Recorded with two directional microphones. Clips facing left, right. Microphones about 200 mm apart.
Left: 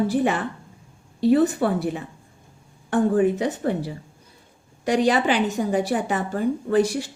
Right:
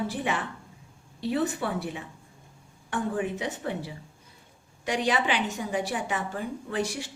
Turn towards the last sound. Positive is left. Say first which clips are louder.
# left 10 dB
turn(degrees=40)  # may be behind; listen again after turning